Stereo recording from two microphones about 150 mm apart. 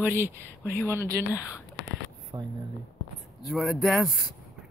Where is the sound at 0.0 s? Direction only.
15° right (ahead or behind).